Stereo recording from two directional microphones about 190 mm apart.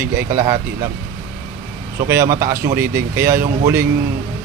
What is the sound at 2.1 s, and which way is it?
A man's voice, 15° right (ahead or behind).